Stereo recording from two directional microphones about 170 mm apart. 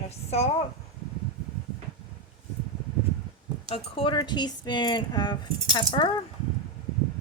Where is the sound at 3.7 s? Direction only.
30° left (ahead or behind).